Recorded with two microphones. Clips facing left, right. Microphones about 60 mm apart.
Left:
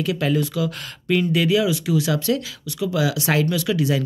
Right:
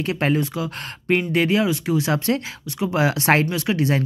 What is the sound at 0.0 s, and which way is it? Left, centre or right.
Speech, right.